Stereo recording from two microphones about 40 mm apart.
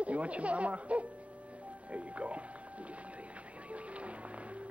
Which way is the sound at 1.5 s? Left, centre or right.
Right.